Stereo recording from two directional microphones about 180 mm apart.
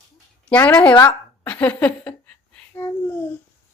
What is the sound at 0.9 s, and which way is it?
Speech, 25° left (ahead or behind).